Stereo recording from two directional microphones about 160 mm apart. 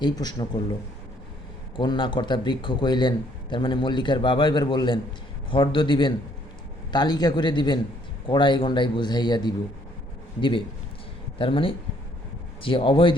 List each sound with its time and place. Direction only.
0.0 s a man's voice: 25° left (ahead or behind)
11.3 s a man's voice: 35° left (ahead or behind)